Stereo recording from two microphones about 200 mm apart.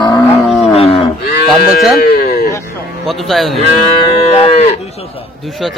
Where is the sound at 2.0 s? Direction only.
50° left (ahead or behind).